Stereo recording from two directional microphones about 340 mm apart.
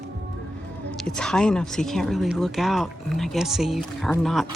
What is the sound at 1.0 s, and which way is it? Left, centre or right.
Speech, centre.